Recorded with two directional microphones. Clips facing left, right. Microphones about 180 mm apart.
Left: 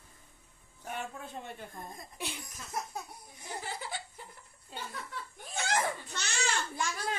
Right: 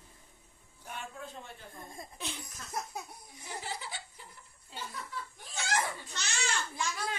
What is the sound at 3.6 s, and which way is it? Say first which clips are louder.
Laughter: left 2 dB; 50° left (ahead or behind).